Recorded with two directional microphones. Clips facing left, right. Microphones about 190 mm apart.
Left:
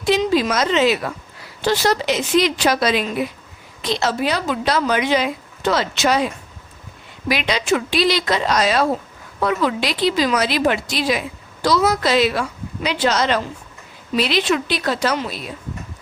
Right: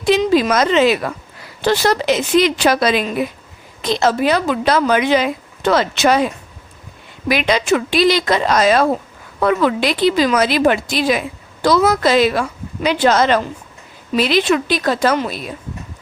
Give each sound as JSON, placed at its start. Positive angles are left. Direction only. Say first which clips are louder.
{"t": 0.1, "sound": "a woman's voice", "louder": "right 4 dB", "side_deg": -55}
{"t": 7.3, "sound": "speech", "louder": "right 4 dB", "side_deg": -50}